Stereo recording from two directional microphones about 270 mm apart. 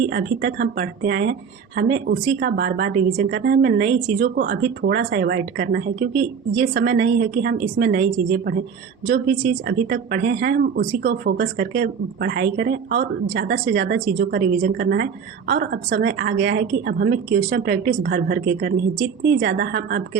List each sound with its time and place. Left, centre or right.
0.1 s speech: right